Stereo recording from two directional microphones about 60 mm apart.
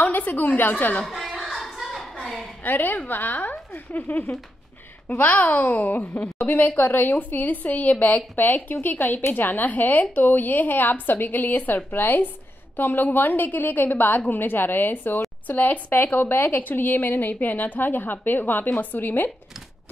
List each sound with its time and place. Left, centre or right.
0.0 s a woman's voice: left
1.0 s a sound: centre
2.6 s a woman's voice: left